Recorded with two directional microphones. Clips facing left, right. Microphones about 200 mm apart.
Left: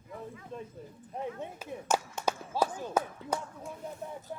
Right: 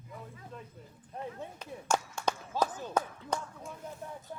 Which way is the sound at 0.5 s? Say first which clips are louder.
Left 6 dB; 25° left (ahead or behind).